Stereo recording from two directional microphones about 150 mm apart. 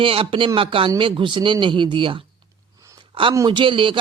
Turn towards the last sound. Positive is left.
turn(degrees=-35)  # may be behind; listen again after turning